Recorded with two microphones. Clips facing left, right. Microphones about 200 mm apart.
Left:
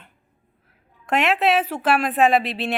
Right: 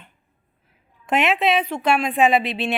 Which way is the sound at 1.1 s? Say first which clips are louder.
Even; centre (ahead or behind).